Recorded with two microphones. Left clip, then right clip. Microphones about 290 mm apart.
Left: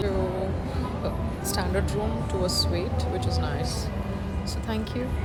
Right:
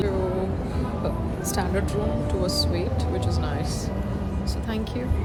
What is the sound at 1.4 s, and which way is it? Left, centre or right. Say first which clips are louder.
Speech: right 1 dB; centre.